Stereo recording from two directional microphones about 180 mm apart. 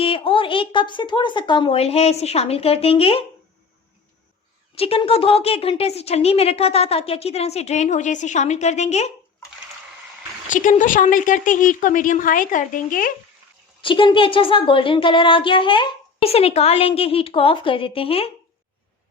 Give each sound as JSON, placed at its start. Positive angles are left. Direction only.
{"t": 0.0, "sound": "a woman's voice", "side_deg": 30}
{"t": 4.7, "sound": "a woman's voice", "side_deg": 35}
{"t": 10.5, "sound": "a woman's voice", "side_deg": 45}
{"t": 13.8, "sound": "speech", "side_deg": 30}